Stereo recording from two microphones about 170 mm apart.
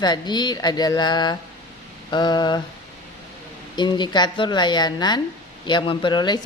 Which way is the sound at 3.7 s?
25° left (ahead or behind).